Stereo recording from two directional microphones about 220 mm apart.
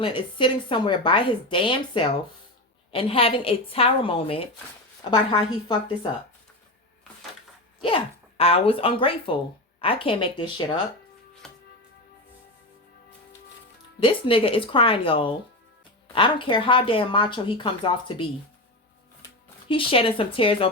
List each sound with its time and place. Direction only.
0.0 s speech: 20° left (ahead or behind)
7.8 s speech: 25° left (ahead or behind)
11.4 s music: 5° left (ahead or behind)
14.0 s speech: 25° left (ahead or behind)
19.6 s speech: 25° left (ahead or behind)